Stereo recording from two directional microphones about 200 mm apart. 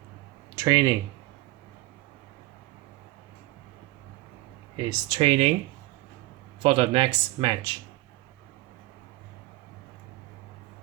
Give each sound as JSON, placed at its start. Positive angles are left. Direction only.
{"t": 0.5, "sound": "speech", "side_deg": -20}
{"t": 4.8, "sound": "speech", "side_deg": -20}
{"t": 6.6, "sound": "speech", "side_deg": -30}